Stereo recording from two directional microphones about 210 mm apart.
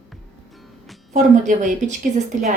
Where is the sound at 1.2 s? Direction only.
35° right (ahead or behind).